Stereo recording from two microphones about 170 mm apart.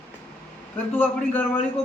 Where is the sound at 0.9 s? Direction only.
10° left (ahead or behind).